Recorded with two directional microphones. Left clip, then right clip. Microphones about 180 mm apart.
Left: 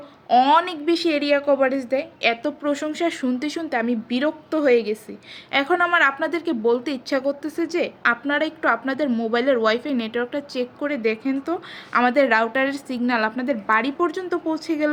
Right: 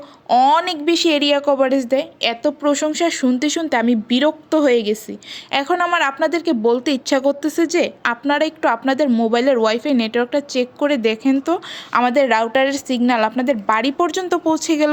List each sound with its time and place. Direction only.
0.3 s a woman's voice: 40° right (ahead or behind)